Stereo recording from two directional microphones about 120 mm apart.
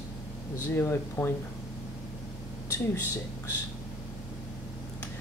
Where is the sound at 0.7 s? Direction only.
20° left (ahead or behind).